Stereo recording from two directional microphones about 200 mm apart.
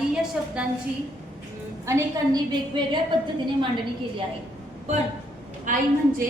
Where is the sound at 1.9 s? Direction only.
15° right (ahead or behind).